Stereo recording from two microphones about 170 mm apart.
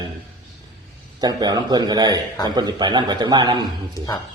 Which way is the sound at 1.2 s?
25° right (ahead or behind).